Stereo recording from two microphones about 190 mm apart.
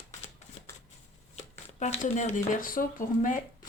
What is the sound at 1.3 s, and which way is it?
Speech, 35° left (ahead or behind).